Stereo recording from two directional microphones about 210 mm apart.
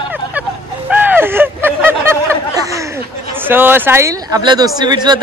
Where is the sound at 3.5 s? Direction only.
10° right (ahead or behind).